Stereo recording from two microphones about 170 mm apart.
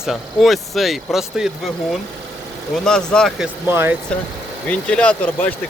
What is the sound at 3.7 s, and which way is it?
Speech, 15° right (ahead or behind).